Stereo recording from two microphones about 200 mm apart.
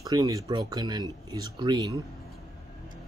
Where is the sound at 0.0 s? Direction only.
20° right (ahead or behind).